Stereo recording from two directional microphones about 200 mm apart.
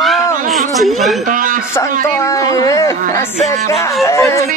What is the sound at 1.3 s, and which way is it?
Speech, 45° right (ahead or behind).